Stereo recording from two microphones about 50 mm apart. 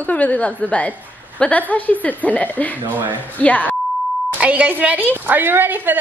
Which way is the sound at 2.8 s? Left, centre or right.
Right.